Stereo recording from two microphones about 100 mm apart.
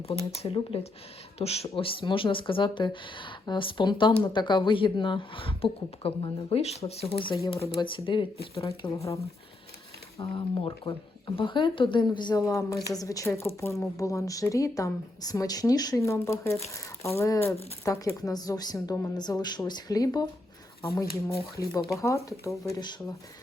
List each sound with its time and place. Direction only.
0.3 s speech: 75° left (ahead or behind)
1.4 s speech: 90° left; by 7.3 s 70° left (ahead or behind)
7.8 s speech: 55° left (ahead or behind)
9.0 s a woman's voice: 30° left (ahead or behind)
10.2 s a woman's voice: 65° left (ahead or behind); by 12.4 s 45° left (ahead or behind)
12.4 s a woman's voice: 35° left (ahead or behind)
21.5 s a woman's voice: 35° left (ahead or behind)